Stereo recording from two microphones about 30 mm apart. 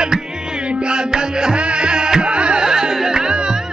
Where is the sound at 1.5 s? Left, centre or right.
Right.